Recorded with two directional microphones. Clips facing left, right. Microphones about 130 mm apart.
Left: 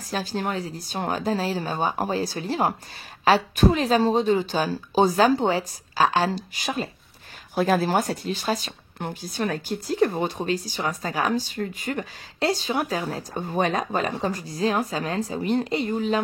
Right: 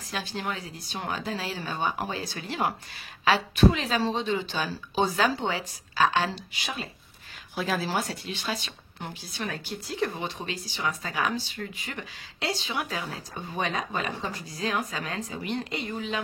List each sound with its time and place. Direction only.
0.1 s a woman's voice: 40° left (ahead or behind)